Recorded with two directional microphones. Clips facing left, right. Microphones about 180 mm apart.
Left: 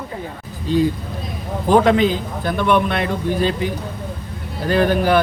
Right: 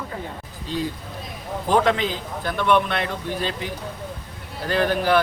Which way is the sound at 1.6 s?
15° left (ahead or behind).